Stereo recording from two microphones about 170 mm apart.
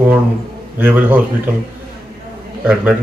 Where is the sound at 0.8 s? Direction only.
10° right (ahead or behind).